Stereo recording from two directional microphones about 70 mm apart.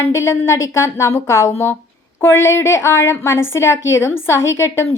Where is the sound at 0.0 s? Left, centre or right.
Left.